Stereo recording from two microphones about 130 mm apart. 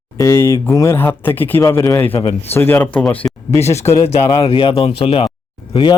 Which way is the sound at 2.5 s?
15° left (ahead or behind).